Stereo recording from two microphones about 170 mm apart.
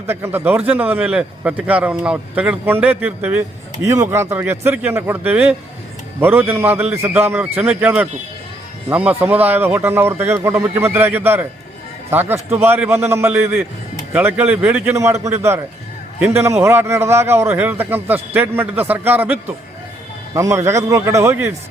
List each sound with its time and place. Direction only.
0.1 s a man's voice: 15° right (ahead or behind)